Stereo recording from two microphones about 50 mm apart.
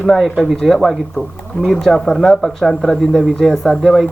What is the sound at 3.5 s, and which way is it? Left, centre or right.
Speech, centre.